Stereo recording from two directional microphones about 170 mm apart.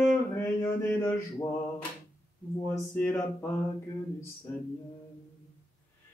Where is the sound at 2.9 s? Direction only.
15° left (ahead or behind).